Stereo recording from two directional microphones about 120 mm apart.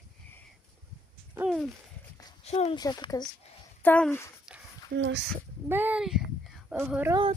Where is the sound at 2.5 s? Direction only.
60° left (ahead or behind).